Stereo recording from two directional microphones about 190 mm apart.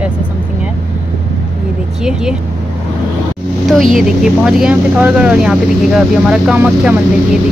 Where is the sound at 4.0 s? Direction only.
Centre (ahead or behind).